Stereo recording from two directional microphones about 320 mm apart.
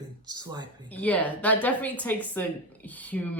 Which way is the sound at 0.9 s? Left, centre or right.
Centre.